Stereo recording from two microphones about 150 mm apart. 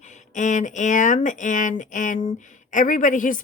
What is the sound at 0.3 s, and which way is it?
Speech, 55° left (ahead or behind).